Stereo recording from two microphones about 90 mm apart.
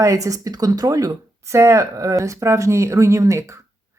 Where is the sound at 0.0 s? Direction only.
35° right (ahead or behind).